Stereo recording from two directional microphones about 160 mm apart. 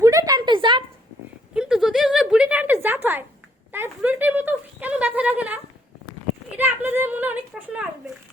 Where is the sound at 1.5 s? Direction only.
5° right (ahead or behind).